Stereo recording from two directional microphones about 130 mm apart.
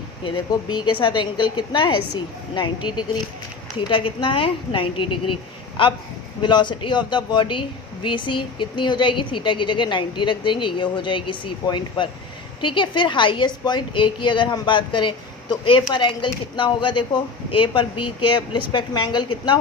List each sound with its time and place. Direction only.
0.3 s speech: 35° left (ahead or behind)